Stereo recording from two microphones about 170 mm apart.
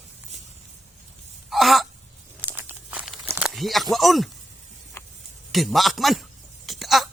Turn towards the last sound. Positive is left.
turn(degrees=0)  # may be behind; listen again after turning